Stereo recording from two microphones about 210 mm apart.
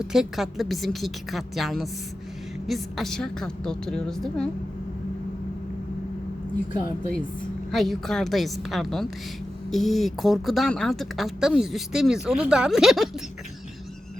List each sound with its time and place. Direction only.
0.0 s speech: centre (ahead or behind)
7.7 s speech: centre (ahead or behind)